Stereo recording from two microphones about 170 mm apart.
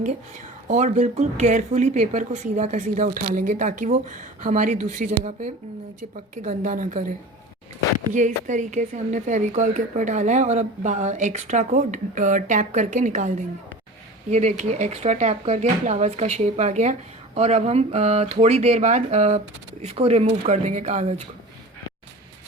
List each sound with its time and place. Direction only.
0.0 s speech: 45° right (ahead or behind)
6.3 s speech: 45° right (ahead or behind)
8.1 s speech: 45° right (ahead or behind)